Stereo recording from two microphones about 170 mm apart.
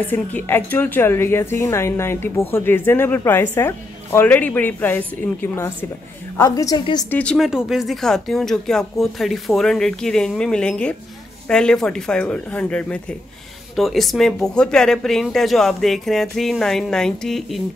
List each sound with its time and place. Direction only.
0.0 s a woman's voice: 10° left (ahead or behind)
7.1 s speech: 10° left (ahead or behind)